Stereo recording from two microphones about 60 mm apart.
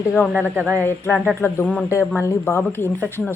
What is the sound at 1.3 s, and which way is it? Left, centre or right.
A woman's voice, left.